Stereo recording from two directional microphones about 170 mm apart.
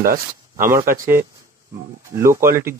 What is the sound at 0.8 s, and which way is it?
Speech, 55° right (ahead or behind).